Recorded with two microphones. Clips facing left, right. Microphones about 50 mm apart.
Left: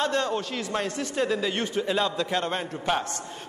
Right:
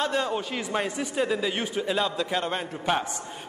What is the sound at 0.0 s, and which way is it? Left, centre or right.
A man's voice, centre.